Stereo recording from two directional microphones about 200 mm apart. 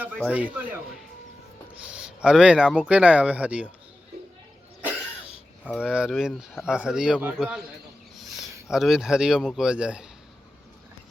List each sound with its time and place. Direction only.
0.2 s speech: 5° right (ahead or behind)
5.8 s speech: 5° right (ahead or behind)